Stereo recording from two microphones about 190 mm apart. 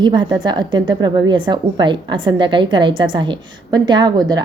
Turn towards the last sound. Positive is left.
turn(degrees=-20)  # may be behind; listen again after turning